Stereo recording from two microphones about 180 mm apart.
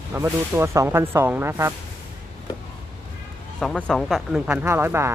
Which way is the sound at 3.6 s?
5° left (ahead or behind).